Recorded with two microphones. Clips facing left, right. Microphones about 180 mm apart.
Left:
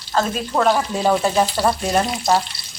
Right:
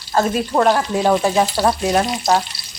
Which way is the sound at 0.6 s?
Centre (ahead or behind).